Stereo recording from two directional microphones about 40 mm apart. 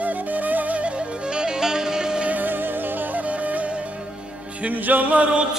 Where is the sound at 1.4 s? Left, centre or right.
Centre.